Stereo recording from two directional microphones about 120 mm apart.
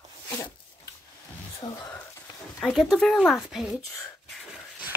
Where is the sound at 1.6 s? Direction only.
40° left (ahead or behind).